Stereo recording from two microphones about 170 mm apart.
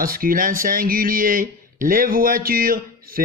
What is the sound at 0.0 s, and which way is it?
Speech, 55° right (ahead or behind).